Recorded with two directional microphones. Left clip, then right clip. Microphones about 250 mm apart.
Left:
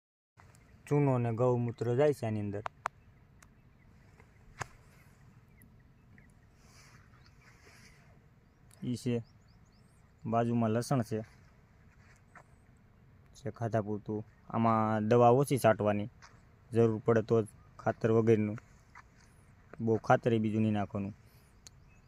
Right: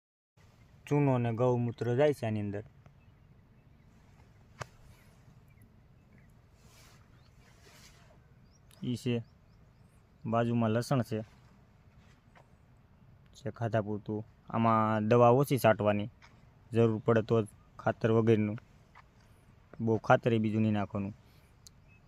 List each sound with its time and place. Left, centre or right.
0.9 s speech: centre
4.6 s a sound: left
7.6 s a sound: centre
8.8 s speech: centre
10.2 s speech: centre
13.4 s speech: centre
19.8 s speech: centre